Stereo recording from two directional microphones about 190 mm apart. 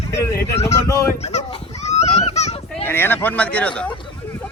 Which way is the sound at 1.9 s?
35° left (ahead or behind).